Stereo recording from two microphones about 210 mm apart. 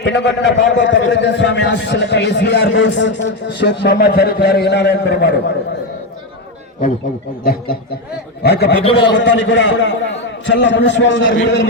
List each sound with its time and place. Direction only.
0.0 s a man's voice: 55° left (ahead or behind)
7.4 s a man's voice: 45° left (ahead or behind)
8.8 s a man's voice: 25° left (ahead or behind)
9.0 s a man's voice: 60° left (ahead or behind)